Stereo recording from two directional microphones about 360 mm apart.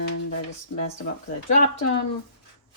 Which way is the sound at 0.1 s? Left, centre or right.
Left.